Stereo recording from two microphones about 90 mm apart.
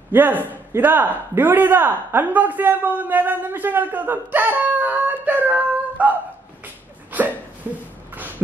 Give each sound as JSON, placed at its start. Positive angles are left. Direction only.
{"t": 0.1, "sound": "a man's voice", "side_deg": -20}
{"t": 7.1, "sound": "hiccup", "side_deg": -20}